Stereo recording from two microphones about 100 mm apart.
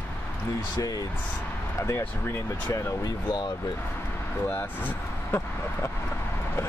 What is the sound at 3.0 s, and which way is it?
Speech, 45° left (ahead or behind).